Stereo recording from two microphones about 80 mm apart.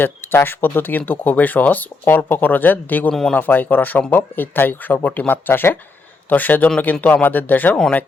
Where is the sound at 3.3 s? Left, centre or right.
Left.